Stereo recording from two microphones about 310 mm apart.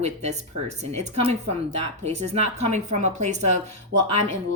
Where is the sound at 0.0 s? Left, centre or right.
Right.